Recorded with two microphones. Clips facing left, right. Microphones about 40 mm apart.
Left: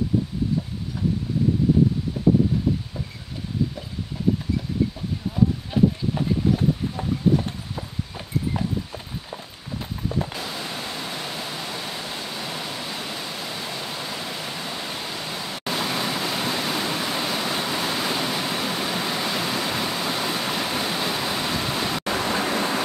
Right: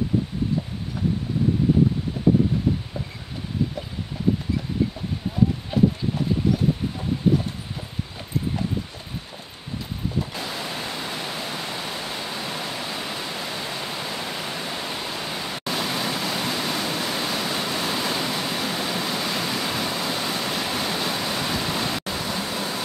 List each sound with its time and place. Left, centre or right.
5.7 s clip-clop: centre
10.5 s pink noise: centre
15.6 s waterfall: centre
22.0 s a sound: left